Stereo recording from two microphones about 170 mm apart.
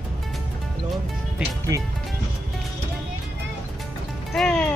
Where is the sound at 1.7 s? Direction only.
20° right (ahead or behind).